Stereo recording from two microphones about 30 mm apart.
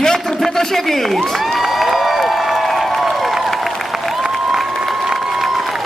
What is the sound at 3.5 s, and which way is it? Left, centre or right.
Applause, centre.